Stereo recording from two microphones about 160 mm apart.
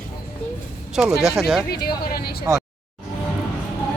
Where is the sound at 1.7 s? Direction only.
70° left (ahead or behind).